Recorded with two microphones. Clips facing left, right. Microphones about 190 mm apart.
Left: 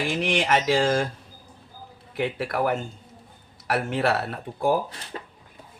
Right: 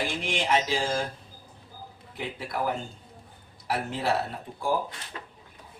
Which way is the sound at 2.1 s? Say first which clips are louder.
Left 7 dB; 70° left (ahead or behind).